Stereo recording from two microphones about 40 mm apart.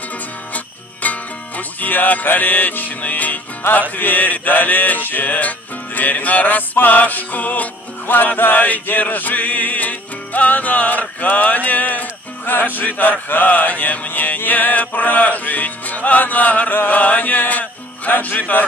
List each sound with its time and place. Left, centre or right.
1.0 s music: left
3.0 s music: left
11.9 s speech: left
13.3 s music: left